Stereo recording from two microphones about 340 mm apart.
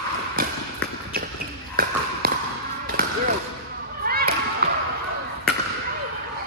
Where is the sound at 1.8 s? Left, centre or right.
Right.